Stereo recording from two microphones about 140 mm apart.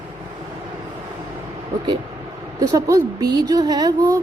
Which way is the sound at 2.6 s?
25° right (ahead or behind).